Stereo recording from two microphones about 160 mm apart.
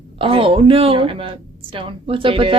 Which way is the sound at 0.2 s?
35° right (ahead or behind).